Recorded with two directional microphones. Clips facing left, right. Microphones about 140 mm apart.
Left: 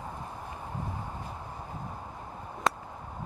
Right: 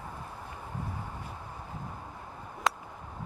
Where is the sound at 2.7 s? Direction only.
Centre (ahead or behind).